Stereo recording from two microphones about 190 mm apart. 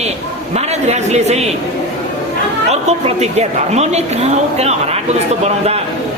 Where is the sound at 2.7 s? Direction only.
35° right (ahead or behind).